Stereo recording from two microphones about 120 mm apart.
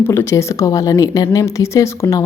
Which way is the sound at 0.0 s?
20° left (ahead or behind).